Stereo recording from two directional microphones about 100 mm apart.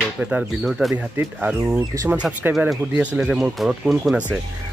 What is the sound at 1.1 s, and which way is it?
Speech, 25° right (ahead or behind).